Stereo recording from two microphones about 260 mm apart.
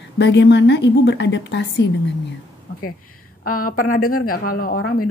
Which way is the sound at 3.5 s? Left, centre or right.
Left.